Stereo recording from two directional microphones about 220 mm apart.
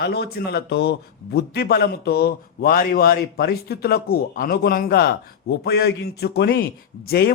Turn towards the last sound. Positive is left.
turn(degrees=45)  # may be behind; listen again after turning